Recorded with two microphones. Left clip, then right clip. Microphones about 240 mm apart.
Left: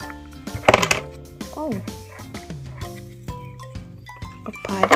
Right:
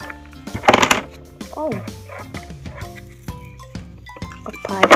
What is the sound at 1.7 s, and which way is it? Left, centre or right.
Music, centre.